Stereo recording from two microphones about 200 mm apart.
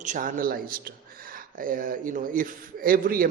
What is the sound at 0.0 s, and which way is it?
Speech, 40° right (ahead or behind).